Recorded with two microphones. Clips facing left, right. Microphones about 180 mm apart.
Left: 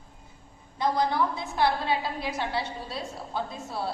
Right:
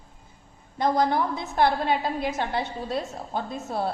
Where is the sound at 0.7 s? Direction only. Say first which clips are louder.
Right 3 dB; 50° right (ahead or behind).